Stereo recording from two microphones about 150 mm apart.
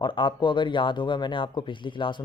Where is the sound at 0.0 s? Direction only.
35° left (ahead or behind).